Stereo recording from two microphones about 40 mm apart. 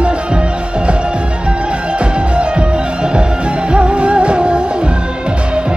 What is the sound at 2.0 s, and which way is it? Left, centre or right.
Music, right.